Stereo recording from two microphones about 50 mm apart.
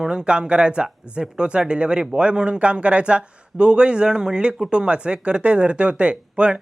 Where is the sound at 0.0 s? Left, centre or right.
Centre.